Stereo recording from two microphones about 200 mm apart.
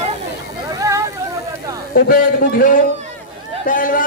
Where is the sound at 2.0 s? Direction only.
45° left (ahead or behind).